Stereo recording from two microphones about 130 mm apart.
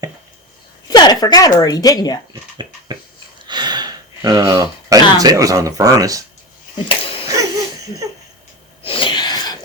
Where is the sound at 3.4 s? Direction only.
35° right (ahead or behind).